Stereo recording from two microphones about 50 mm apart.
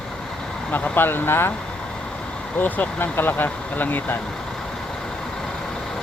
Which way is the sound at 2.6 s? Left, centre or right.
Left.